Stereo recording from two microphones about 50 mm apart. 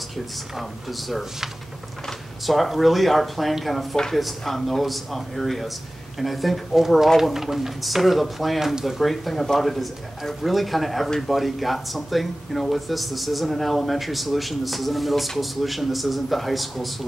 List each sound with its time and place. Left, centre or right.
0.6 s speech: centre